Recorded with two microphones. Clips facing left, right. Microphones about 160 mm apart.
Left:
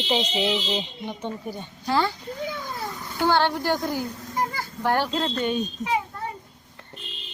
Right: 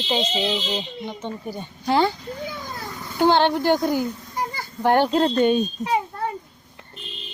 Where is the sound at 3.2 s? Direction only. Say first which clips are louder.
Right 4 dB; 20° right (ahead or behind).